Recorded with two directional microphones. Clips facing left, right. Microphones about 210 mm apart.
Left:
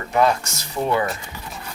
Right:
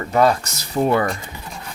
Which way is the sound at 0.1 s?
35° right (ahead or behind).